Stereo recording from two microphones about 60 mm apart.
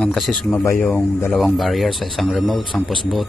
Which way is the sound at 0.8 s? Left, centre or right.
Left.